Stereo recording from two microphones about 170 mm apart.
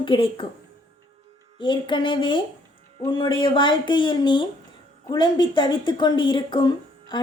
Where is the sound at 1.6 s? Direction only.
30° left (ahead or behind).